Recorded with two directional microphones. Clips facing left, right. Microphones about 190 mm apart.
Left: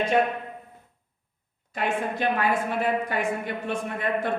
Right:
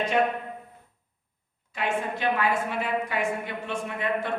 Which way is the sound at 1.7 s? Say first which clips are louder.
Left 1 dB; 45° left (ahead or behind).